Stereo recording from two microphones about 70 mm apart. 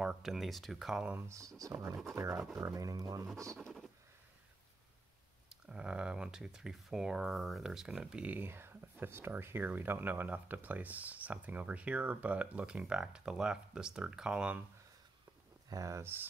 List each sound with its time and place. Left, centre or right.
0.0 s speech: centre
1.6 s speech: right
5.5 s speech: centre
8.3 s speech: right; by 14.6 s centre
15.7 s speech: right
16.0 s speech: right